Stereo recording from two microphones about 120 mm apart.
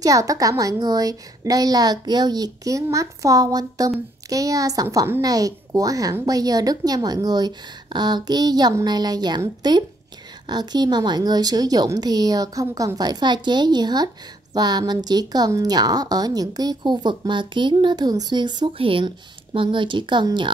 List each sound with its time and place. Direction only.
0.0 s a woman's voice: 30° right (ahead or behind)
5.2 s a woman's voice: 30° right (ahead or behind)